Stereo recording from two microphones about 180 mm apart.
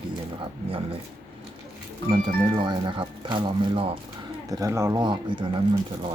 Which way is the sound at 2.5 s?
25° right (ahead or behind).